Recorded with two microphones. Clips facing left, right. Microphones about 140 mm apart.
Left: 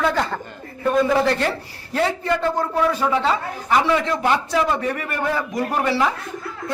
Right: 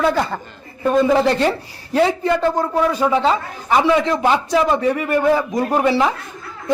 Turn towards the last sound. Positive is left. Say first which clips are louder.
# right 4 dB
turn(degrees=-20)  # may be behind; listen again after turning